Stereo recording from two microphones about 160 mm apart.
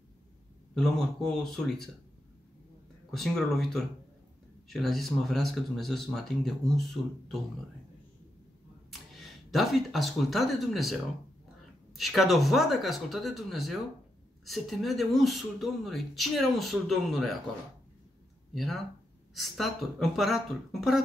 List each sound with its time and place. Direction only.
0.7 s speech: 5° left (ahead or behind)
3.1 s speech: centre (ahead or behind)
9.1 s speech: centre (ahead or behind)
18.5 s speech: centre (ahead or behind)